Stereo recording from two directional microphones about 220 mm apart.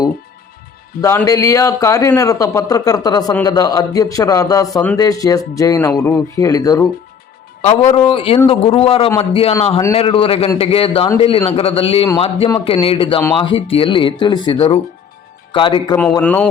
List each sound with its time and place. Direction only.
1.0 s a man's voice: 15° left (ahead or behind)
7.9 s a man's voice: 25° left (ahead or behind)
16.2 s speech: 5° left (ahead or behind)